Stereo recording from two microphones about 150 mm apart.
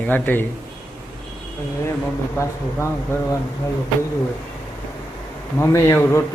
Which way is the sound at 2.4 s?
20° left (ahead or behind).